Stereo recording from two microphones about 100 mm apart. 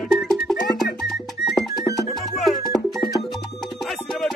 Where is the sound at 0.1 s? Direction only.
Centre (ahead or behind).